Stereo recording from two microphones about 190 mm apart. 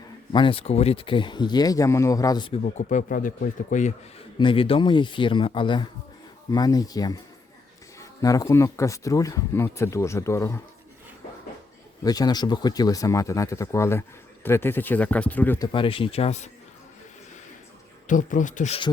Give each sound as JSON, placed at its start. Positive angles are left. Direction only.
{"t": 0.3, "sound": "speech", "side_deg": 30}
{"t": 2.6, "sound": "speech", "side_deg": 40}
{"t": 4.4, "sound": "speech", "side_deg": 25}
{"t": 12.0, "sound": "speech", "side_deg": 20}
{"t": 18.1, "sound": "speech", "side_deg": 40}